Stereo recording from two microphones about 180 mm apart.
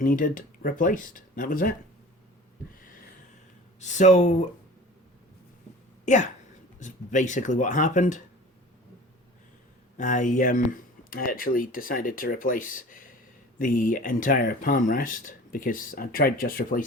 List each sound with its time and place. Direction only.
0.0 s speech: 50° left (ahead or behind)
3.8 s speech: 40° left (ahead or behind)
6.1 s speech: 45° left (ahead or behind)
10.0 s speech: 45° left (ahead or behind)